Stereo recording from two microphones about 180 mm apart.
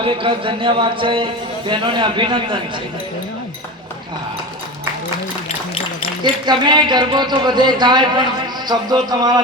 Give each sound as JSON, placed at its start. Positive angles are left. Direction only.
{"t": 0.0, "sound": "a man's voice", "side_deg": -30}
{"t": 6.2, "sound": "a man's voice", "side_deg": -25}